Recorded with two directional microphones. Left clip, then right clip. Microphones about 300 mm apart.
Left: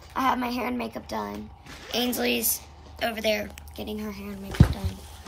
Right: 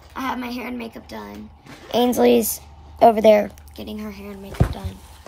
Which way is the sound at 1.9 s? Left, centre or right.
Right.